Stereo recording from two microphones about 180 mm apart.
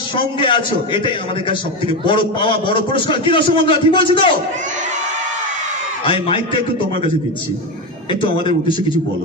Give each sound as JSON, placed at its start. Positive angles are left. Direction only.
{"t": 0.1, "sound": "a man's voice", "side_deg": 25}
{"t": 6.0, "sound": "a man's voice", "side_deg": 30}
{"t": 8.1, "sound": "a man's voice", "side_deg": 25}